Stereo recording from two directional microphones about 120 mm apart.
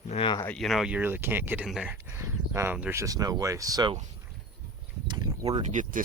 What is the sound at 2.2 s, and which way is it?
Speech, 25° right (ahead or behind).